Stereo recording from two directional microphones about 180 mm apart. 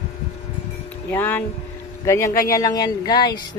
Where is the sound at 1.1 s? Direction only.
10° left (ahead or behind).